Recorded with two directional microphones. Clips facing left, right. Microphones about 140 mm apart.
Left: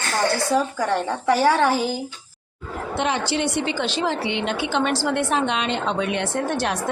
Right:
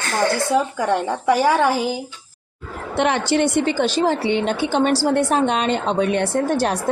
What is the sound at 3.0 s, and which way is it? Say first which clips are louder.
A woman's voice: right 5 dB; 60° right (ahead or behind).